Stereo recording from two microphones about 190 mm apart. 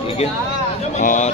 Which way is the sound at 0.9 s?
40° left (ahead or behind).